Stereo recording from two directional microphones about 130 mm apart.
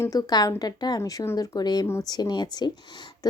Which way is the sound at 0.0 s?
25° left (ahead or behind).